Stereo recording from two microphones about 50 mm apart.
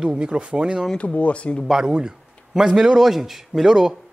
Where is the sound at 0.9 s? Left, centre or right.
Left.